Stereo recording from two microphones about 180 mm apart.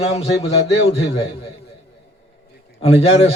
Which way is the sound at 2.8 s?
35° left (ahead or behind).